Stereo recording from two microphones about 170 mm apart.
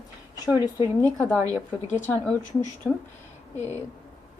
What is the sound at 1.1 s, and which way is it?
A woman's voice, 5° left (ahead or behind).